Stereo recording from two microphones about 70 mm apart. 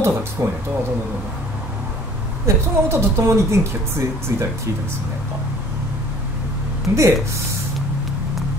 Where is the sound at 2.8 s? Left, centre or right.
Right.